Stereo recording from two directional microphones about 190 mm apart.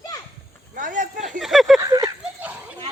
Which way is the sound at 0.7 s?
45° right (ahead or behind).